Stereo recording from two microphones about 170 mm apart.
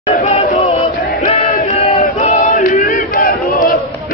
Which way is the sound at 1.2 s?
50° left (ahead or behind).